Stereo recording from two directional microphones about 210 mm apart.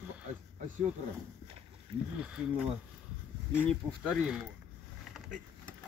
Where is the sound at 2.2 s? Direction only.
5° right (ahead or behind).